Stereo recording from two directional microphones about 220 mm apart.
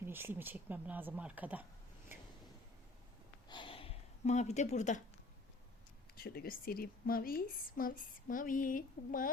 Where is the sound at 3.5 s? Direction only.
25° left (ahead or behind).